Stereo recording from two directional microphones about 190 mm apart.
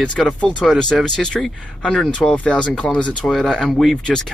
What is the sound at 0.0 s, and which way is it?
Speech, 5° left (ahead or behind).